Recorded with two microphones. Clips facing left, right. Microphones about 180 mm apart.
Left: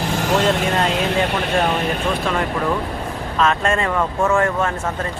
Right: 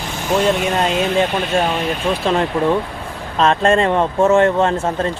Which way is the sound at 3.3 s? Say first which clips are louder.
Right 5 dB; 30° right (ahead or behind).